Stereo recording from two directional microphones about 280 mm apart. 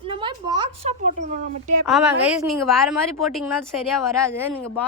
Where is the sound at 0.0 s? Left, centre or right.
Centre.